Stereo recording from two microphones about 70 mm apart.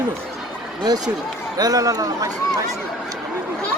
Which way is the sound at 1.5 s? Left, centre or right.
Right.